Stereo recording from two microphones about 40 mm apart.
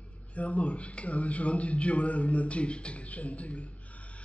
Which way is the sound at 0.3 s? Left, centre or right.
Left.